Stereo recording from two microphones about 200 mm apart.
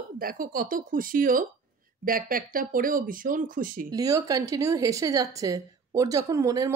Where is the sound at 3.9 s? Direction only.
15° right (ahead or behind).